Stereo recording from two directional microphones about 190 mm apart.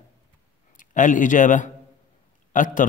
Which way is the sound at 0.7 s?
45° left (ahead or behind).